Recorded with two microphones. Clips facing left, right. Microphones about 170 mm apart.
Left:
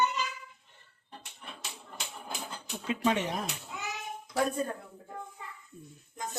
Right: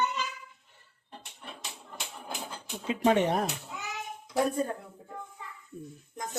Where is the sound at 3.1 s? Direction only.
55° right (ahead or behind).